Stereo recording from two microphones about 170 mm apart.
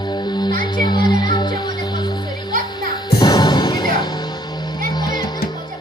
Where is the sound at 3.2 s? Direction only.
25° left (ahead or behind).